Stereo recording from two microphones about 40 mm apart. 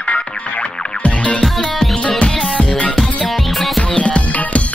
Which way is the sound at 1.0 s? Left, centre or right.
Left.